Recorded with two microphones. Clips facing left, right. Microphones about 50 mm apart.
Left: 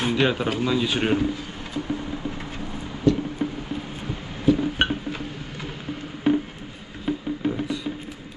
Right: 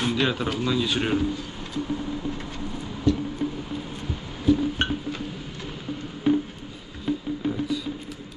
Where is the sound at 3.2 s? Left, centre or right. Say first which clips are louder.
Left 1 dB; centre.